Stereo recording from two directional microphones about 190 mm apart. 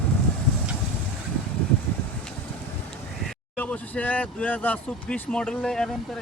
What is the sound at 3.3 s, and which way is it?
Speech, 5° left (ahead or behind).